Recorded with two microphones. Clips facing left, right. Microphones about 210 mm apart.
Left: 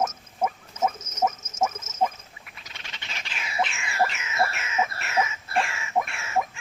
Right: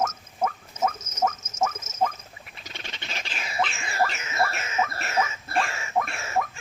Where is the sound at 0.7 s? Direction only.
35° right (ahead or behind).